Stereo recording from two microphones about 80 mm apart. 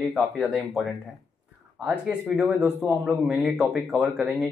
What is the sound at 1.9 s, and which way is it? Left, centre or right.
Speech, centre.